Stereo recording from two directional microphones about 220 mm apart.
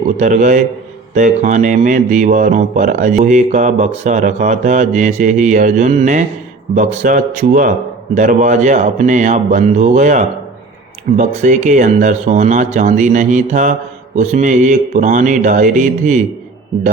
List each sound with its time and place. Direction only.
0.2 s speech: 35° right (ahead or behind)